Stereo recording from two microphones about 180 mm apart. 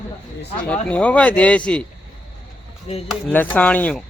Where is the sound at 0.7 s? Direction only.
10° left (ahead or behind).